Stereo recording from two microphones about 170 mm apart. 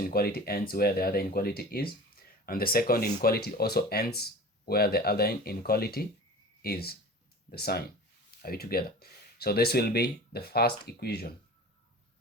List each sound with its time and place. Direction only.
0.1 s speech: 65° left (ahead or behind)